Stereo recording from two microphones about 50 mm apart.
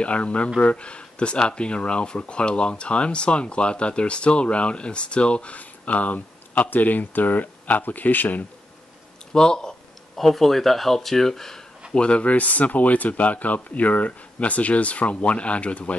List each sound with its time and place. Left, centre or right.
0.0 s speech: left
9.3 s speech: centre
11.9 s speech: left